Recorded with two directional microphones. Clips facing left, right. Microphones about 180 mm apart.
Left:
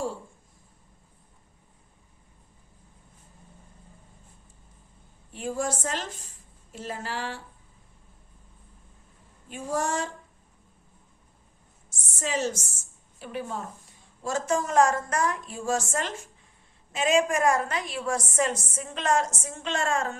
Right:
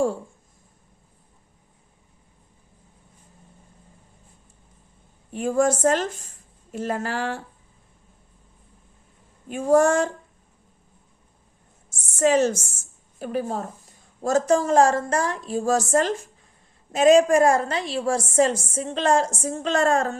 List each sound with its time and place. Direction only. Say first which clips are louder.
5.3 s a woman's voice: right 9 dB; 50° right (ahead or behind)
9.5 s a woman's voice: right 11 dB; 50° right (ahead or behind)
11.9 s a sound: right 12 dB; 50° right (ahead or behind)
13.1 s a woman's voice: right 7 dB; 40° right (ahead or behind)